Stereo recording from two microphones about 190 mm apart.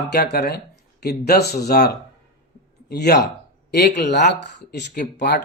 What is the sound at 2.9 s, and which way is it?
Speech, 60° left (ahead or behind).